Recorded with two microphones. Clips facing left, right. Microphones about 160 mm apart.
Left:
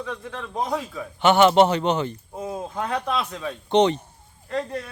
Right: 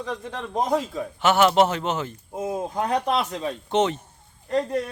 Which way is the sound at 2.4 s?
15° right (ahead or behind).